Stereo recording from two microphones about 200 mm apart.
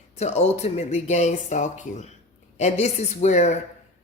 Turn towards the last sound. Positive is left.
turn(degrees=35)  # may be behind; listen again after turning